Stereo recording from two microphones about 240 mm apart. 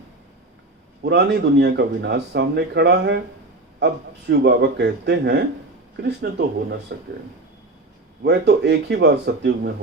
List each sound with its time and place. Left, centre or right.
1.0 s a man's voice: right
8.2 s a man's voice: right